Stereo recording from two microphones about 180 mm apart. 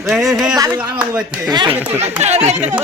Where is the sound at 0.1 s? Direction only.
Centre (ahead or behind).